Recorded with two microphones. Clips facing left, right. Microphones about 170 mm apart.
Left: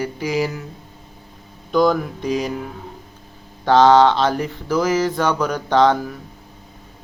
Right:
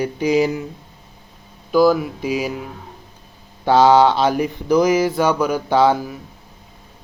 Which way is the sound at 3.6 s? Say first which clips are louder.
Even; 10° right (ahead or behind).